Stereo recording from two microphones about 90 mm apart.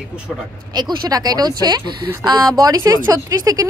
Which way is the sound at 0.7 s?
50° right (ahead or behind).